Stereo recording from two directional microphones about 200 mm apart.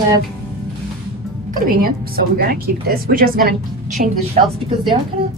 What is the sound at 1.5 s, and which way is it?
Speech, 45° right (ahead or behind).